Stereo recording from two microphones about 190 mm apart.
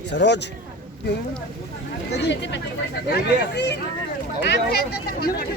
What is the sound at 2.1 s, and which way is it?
Speech, 65° left (ahead or behind).